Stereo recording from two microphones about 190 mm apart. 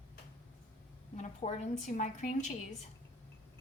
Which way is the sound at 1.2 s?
35° left (ahead or behind).